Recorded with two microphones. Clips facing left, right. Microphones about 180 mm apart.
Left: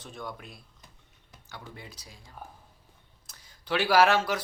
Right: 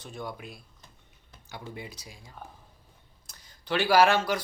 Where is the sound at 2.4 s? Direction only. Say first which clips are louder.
Even; 5° left (ahead or behind).